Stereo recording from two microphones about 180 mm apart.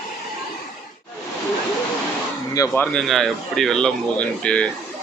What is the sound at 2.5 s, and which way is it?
Speech, 20° left (ahead or behind).